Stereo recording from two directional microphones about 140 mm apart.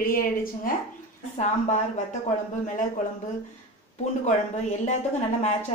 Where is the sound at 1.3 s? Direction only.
55° left (ahead or behind).